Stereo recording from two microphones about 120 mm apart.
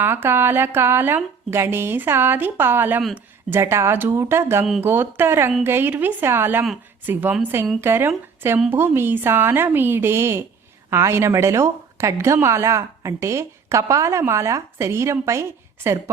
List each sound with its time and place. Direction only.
0.0 s a woman's voice: 20° right (ahead or behind)